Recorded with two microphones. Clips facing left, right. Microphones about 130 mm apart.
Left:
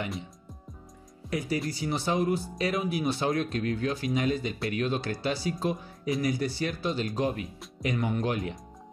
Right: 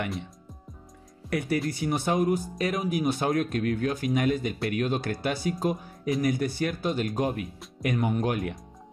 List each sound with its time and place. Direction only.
1.3 s speech: 65° right (ahead or behind)
1.7 s a man's voice: 55° right (ahead or behind)